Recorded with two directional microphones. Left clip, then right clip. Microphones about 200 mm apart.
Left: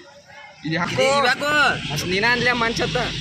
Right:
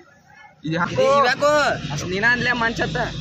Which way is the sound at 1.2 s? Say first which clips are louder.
Right 1 dB; centre (ahead or behind).